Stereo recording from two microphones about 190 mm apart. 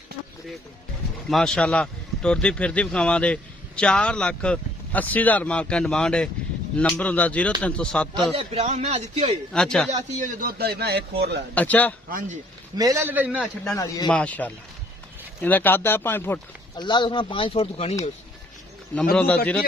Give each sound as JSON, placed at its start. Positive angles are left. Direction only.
{"t": 1.3, "sound": "speech", "side_deg": 5}
{"t": 8.2, "sound": "a man's voice", "side_deg": -30}
{"t": 9.5, "sound": "speech", "side_deg": 5}
{"t": 9.9, "sound": "a man's voice", "side_deg": -40}
{"t": 10.6, "sound": "speech", "side_deg": -55}
{"t": 11.5, "sound": "speech", "side_deg": 10}
{"t": 12.7, "sound": "a man's voice", "side_deg": -20}
{"t": 13.7, "sound": "speech", "side_deg": 20}
{"t": 14.1, "sound": "speech", "side_deg": 5}
{"t": 16.7, "sound": "speech", "side_deg": 25}
{"t": 19.1, "sound": "speech", "side_deg": 5}